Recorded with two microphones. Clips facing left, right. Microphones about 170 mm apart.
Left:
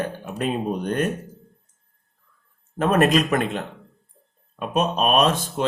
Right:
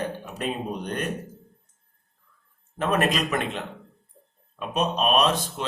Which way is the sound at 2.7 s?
45° left (ahead or behind).